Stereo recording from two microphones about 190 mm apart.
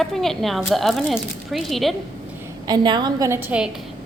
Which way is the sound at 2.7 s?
25° right (ahead or behind).